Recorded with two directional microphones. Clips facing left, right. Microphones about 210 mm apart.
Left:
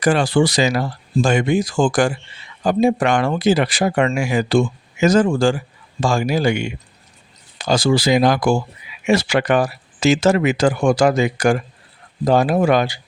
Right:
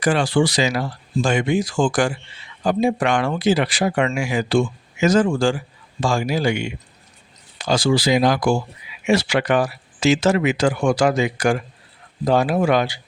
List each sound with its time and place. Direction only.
0.0 s speech: 40° left (ahead or behind)